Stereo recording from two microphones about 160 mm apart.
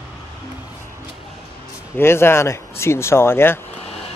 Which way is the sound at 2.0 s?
15° left (ahead or behind).